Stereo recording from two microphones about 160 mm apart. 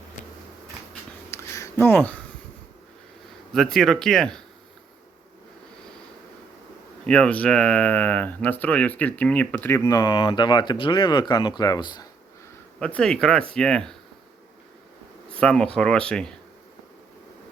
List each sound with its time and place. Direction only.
1.3 s a sound: 15° left (ahead or behind)
3.5 s speech: centre (ahead or behind)
7.0 s speech: 5° left (ahead or behind)
9.8 s speech: 25° left (ahead or behind)
12.8 s speech: 5° left (ahead or behind)
15.4 s speech: 5° left (ahead or behind)